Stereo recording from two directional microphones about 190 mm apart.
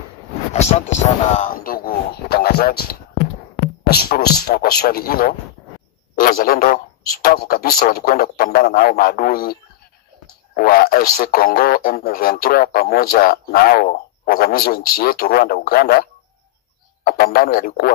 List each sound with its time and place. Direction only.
0.5 s speech: 35° left (ahead or behind)
1.3 s a sound: 45° left (ahead or behind)
3.6 s a man's voice: 55° left (ahead or behind)